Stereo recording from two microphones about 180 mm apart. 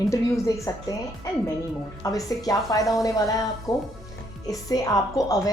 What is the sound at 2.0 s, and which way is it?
A woman's voice, 20° left (ahead or behind).